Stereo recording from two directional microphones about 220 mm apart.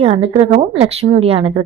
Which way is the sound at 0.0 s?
25° right (ahead or behind).